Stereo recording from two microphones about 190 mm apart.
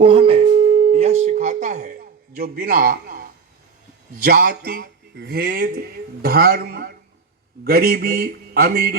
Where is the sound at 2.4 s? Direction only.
50° right (ahead or behind).